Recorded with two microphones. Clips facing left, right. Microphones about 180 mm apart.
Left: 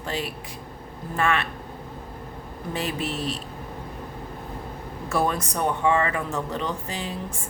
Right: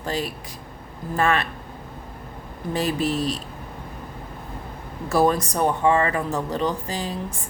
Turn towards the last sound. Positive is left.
turn(degrees=-35)  # may be behind; listen again after turning